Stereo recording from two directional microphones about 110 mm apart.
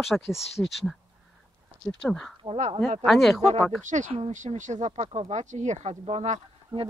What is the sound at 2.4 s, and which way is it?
Speech, 75° right (ahead or behind).